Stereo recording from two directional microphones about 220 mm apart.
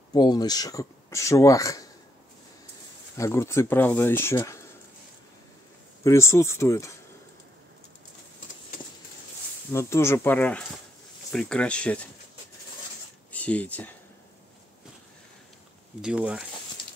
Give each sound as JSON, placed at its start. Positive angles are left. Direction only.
{"t": 0.1, "sound": "speech", "side_deg": 20}
{"t": 3.2, "sound": "speech", "side_deg": 10}
{"t": 6.0, "sound": "speech", "side_deg": 15}
{"t": 9.7, "sound": "speech", "side_deg": 10}
{"t": 13.3, "sound": "speech", "side_deg": 5}
{"t": 16.0, "sound": "speech", "side_deg": -5}